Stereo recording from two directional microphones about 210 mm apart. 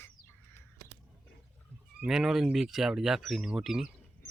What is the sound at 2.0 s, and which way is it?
Speech, 5° right (ahead or behind).